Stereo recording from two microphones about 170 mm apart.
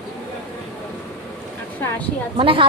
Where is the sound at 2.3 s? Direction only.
30° right (ahead or behind).